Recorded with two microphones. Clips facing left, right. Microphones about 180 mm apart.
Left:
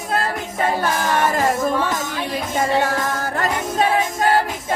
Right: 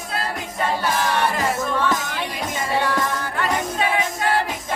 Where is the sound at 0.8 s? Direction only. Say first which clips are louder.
Left 2 dB; 45° left (ahead or behind).